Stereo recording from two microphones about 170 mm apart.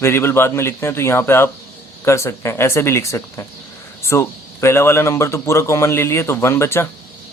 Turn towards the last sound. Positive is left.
turn(degrees=15)  # may be behind; listen again after turning